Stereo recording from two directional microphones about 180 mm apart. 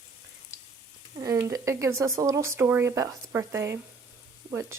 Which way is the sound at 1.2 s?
20° right (ahead or behind).